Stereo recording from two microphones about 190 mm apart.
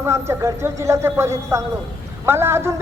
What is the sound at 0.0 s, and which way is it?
Speech, 15° right (ahead or behind).